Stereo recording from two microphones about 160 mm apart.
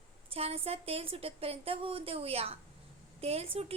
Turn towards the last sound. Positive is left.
turn(degrees=-35)  # may be behind; listen again after turning